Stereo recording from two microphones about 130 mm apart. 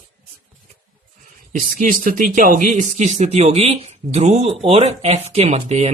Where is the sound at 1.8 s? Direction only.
90° right.